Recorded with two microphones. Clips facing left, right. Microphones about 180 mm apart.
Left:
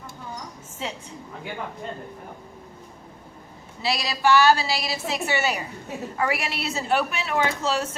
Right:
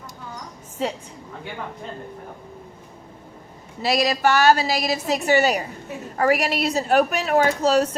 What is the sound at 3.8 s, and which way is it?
A woman's voice, 45° right (ahead or behind).